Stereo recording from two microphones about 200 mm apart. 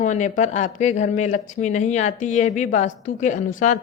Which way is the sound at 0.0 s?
35° left (ahead or behind).